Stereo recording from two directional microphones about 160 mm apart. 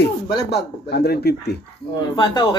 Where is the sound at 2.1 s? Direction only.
30° left (ahead or behind).